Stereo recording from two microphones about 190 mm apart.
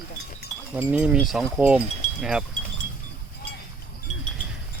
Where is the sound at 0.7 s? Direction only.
5° right (ahead or behind).